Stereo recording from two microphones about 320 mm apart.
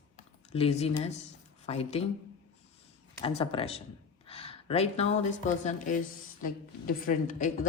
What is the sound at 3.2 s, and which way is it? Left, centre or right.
Speech, centre.